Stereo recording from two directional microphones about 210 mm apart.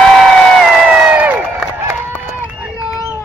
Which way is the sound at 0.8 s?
5° right (ahead or behind).